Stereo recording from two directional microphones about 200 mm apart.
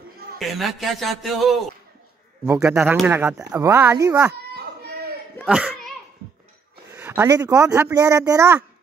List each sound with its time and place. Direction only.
0.4 s a man's voice: centre (ahead or behind)
2.4 s speech: 10° right (ahead or behind)
4.3 s children playing: 50° right (ahead or behind)
5.4 s children playing: centre (ahead or behind)
7.0 s speech: 10° right (ahead or behind)